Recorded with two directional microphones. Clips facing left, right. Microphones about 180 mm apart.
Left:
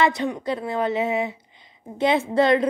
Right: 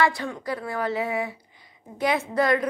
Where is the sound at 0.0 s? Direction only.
20° left (ahead or behind).